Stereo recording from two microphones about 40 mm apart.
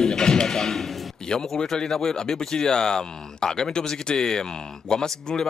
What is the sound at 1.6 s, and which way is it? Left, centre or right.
Speech, centre.